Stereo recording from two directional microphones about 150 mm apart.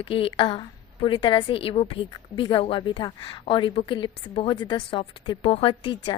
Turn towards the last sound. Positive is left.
turn(degrees=30)  # may be behind; listen again after turning